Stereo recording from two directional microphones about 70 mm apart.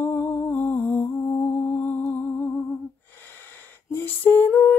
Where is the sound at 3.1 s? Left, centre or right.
Left.